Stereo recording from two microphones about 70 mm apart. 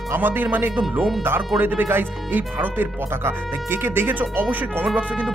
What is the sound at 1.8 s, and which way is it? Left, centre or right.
Speech, right.